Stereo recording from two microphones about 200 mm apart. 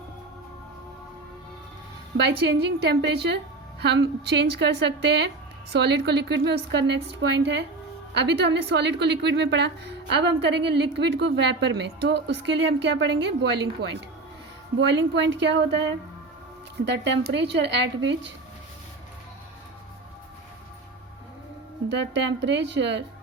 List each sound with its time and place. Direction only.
2.1 s a woman's voice: 60° right (ahead or behind)
16.8 s a woman's voice: 60° right (ahead or behind)
21.8 s a woman's voice: 60° right (ahead or behind)